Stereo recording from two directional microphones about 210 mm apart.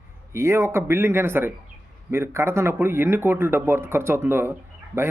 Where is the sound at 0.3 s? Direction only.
15° right (ahead or behind).